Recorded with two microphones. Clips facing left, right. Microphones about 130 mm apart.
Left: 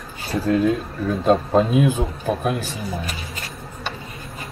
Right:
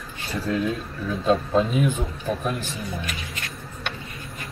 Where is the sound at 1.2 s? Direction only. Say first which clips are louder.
Left 3 dB; 40° left (ahead or behind).